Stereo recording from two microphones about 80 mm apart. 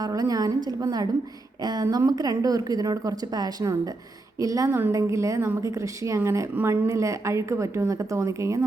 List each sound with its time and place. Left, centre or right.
0.0 s a woman's voice: right